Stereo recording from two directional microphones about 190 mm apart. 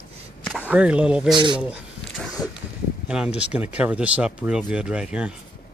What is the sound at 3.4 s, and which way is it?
Speech, 5° right (ahead or behind).